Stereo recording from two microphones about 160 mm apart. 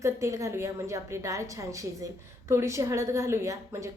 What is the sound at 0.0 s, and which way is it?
A woman's voice, 20° right (ahead or behind).